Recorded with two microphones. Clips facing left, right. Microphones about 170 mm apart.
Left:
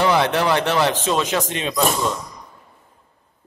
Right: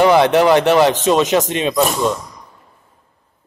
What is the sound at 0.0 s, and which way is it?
Speech, 20° right (ahead or behind).